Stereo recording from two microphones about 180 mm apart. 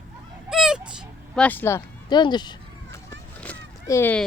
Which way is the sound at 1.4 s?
10° left (ahead or behind).